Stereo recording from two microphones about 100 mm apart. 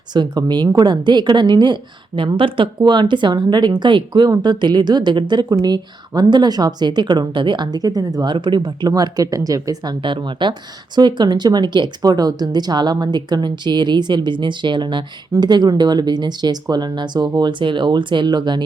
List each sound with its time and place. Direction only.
0.1 s a woman's voice: 45° right (ahead or behind)
8.9 s speech: 35° right (ahead or behind)
10.0 s a woman's voice: 55° right (ahead or behind)